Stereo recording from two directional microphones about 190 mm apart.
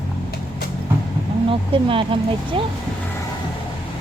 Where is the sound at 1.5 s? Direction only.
25° right (ahead or behind).